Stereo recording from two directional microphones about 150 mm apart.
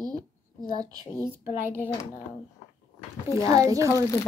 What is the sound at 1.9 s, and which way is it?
Speech, 25° left (ahead or behind).